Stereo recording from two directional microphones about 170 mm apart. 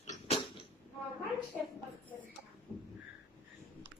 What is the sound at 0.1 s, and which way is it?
Creak, 35° left (ahead or behind).